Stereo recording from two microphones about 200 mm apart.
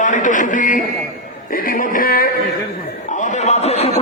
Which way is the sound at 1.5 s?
45° left (ahead or behind).